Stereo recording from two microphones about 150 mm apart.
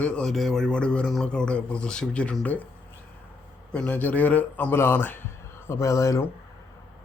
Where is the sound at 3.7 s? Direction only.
10° left (ahead or behind).